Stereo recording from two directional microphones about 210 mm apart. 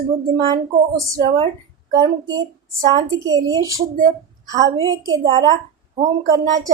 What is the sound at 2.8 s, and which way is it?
A woman's voice, 15° right (ahead or behind).